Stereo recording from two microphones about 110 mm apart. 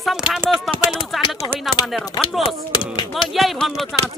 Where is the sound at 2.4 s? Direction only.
45° left (ahead or behind).